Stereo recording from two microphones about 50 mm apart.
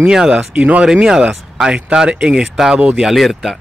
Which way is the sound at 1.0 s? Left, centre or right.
Centre.